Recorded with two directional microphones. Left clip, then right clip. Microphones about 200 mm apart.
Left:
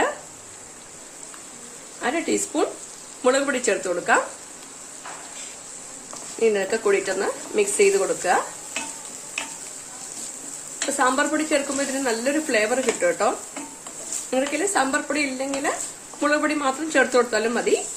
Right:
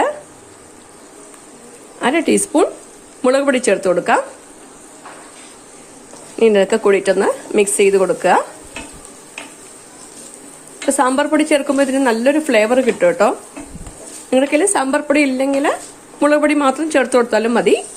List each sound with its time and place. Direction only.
2.0 s speech: 45° right (ahead or behind)
6.4 s speech: 50° right (ahead or behind)
10.9 s speech: 45° right (ahead or behind)